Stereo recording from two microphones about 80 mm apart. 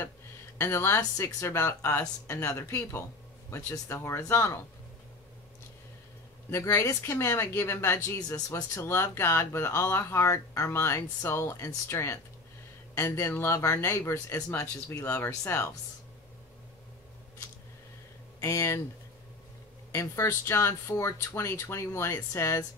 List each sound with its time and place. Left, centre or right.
0.6 s speech: left
6.5 s speech: left
18.4 s speech: left
19.9 s speech: left